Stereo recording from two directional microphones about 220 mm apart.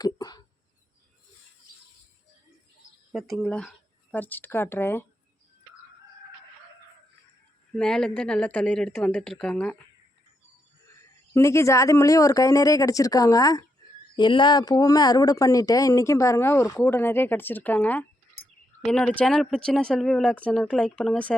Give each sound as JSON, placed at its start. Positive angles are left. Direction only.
{"t": 0.0, "sound": "a sound", "side_deg": 15}
{"t": 3.1, "sound": "speech", "side_deg": 0}
{"t": 7.7, "sound": "speech", "side_deg": 5}
{"t": 11.3, "sound": "speech", "side_deg": 10}